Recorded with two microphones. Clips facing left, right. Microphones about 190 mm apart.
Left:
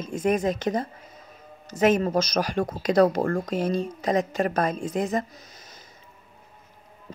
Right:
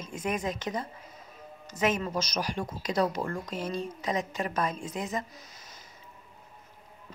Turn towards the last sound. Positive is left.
turn(degrees=50)  # may be behind; listen again after turning